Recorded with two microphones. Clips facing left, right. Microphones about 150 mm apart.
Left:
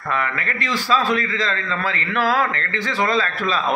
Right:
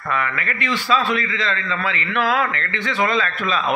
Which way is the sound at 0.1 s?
35° left (ahead or behind).